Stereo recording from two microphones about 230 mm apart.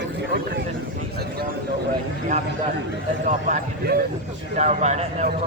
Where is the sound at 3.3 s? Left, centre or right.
Right.